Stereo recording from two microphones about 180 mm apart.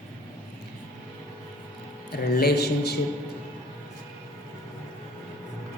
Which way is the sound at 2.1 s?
60° left (ahead or behind).